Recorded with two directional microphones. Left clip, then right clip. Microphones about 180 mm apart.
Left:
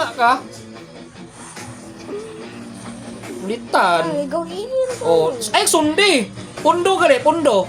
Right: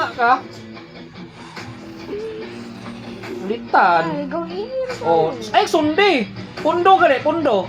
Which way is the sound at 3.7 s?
30° left (ahead or behind).